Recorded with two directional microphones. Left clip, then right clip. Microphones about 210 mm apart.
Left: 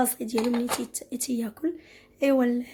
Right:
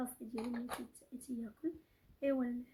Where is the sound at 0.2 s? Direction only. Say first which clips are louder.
Left 17 dB; 40° left (ahead or behind).